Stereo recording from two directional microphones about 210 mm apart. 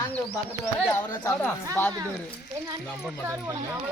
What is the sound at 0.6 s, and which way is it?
Speech, 15° left (ahead or behind).